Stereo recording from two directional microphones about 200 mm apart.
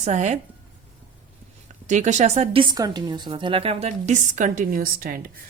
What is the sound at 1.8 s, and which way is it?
Speech, 35° right (ahead or behind).